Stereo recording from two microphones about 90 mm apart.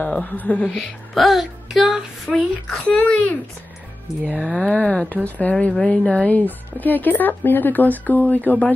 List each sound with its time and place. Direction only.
0.0 s speech: 20° left (ahead or behind)
0.7 s speech: centre (ahead or behind)
2.9 s speech: 10° left (ahead or behind)
4.2 s speech: 15° right (ahead or behind)
4.5 s speech: 10° left (ahead or behind)